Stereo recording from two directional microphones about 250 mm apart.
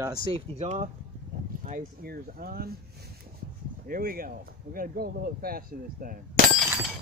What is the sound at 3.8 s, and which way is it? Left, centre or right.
Speech, right.